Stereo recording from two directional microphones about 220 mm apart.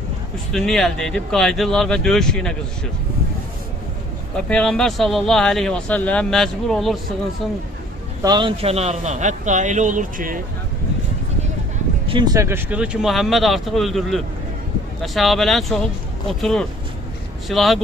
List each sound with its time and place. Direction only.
0.5 s speech: centre (ahead or behind)
4.5 s speech: 5° left (ahead or behind)
8.2 s a man's voice: 20° right (ahead or behind); by 10.4 s 40° right (ahead or behind)
12.1 s speech: 20° right (ahead or behind); by 17.8 s centre (ahead or behind)